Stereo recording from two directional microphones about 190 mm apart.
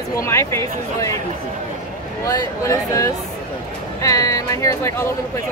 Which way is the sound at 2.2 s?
15° left (ahead or behind).